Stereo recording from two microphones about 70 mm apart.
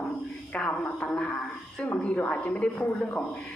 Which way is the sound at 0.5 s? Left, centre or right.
Centre.